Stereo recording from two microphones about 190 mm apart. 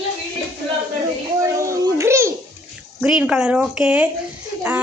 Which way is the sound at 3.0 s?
5° right (ahead or behind).